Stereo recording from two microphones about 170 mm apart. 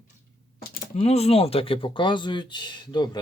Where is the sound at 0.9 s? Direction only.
35° left (ahead or behind).